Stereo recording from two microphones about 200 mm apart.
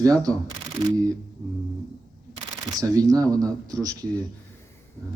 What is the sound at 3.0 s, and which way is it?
Speech, 20° right (ahead or behind).